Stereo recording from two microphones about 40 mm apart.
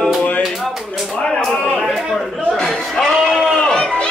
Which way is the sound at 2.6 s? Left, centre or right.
Centre.